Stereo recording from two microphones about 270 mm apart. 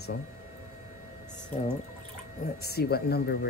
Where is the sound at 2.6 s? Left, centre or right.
Left.